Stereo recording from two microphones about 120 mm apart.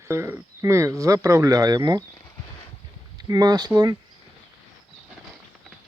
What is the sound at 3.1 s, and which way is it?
Speech, 35° right (ahead or behind).